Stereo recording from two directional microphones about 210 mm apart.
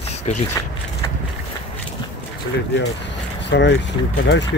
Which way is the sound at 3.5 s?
55° left (ahead or behind).